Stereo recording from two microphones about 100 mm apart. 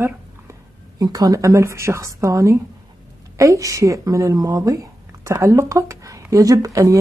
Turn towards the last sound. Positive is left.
turn(degrees=-35)  # may be behind; listen again after turning